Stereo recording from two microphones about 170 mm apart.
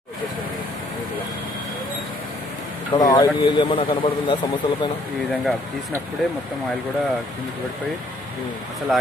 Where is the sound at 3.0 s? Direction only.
25° left (ahead or behind).